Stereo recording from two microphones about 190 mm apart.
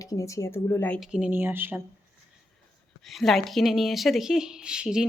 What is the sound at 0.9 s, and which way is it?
Speech, 5° right (ahead or behind).